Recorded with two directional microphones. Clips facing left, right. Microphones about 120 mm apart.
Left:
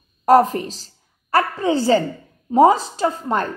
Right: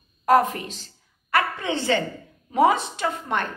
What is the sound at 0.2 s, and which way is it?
A woman's voice, 35° left (ahead or behind).